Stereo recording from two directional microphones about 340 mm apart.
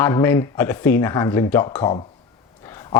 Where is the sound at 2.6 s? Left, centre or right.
Centre.